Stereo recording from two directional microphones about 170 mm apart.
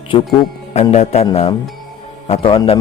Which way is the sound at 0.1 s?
35° left (ahead or behind).